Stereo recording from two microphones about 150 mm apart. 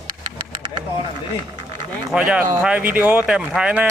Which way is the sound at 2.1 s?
5° right (ahead or behind).